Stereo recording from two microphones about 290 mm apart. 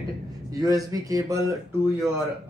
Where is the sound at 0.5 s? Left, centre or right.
Centre.